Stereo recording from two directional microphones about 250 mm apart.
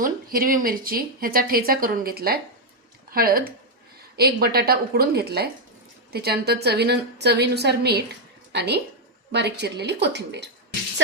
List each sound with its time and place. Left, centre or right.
0.0 s speech: right